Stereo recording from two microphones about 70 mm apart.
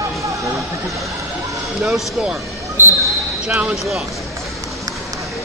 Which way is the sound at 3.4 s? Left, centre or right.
Centre.